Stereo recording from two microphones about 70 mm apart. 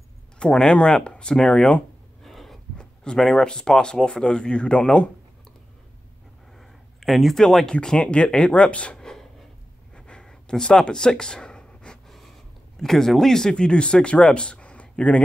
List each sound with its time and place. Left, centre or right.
0.4 s speech: centre
2.2 s speech: centre
6.6 s a sound: centre
7.7 s speech: centre
8.9 s a sound: centre
12.7 s speech: centre